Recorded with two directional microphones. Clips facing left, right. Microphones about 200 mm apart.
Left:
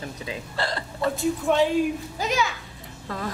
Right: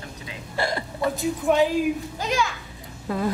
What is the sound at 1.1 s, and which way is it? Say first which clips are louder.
A woman's voice: right 1 dB; centre (ahead or behind).